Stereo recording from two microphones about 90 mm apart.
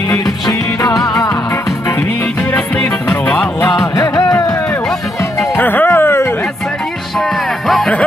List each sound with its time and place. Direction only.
0.1 s music: 40° left (ahead or behind)
2.5 s music: 10° left (ahead or behind)
3.9 s music: 45° left (ahead or behind)
5.6 s music: 20° left (ahead or behind)
7.2 s music: 5° left (ahead or behind)